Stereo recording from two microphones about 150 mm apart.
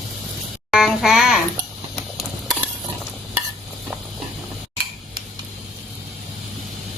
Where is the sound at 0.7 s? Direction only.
Centre (ahead or behind).